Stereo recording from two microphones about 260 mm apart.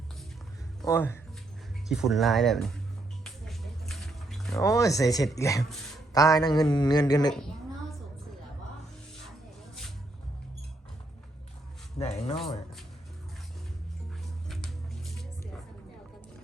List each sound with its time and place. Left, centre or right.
0.9 s speech: centre
3.2 s music: centre
4.5 s speech: centre
11.9 s a sound: left
14.4 s music: centre